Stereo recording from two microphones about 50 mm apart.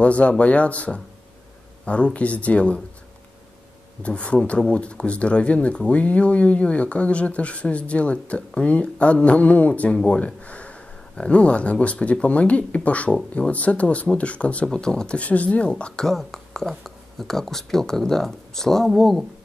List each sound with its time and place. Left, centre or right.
0.0 s speech: left
4.0 s speech: left
9.9 s speech: centre
15.1 s speech: left; by 19.2 s centre